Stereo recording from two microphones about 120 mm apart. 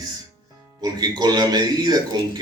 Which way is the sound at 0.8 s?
35° right (ahead or behind).